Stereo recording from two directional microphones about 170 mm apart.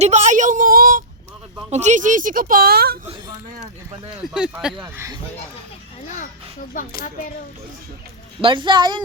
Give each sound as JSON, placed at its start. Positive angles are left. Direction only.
{"t": 0.0, "sound": "a sound", "side_deg": -45}
{"t": 1.7, "sound": "a woman's voice", "side_deg": -45}
{"t": 3.6, "sound": "speech", "side_deg": -35}
{"t": 4.2, "sound": "speech", "side_deg": -5}
{"t": 8.4, "sound": "a woman's voice", "side_deg": -30}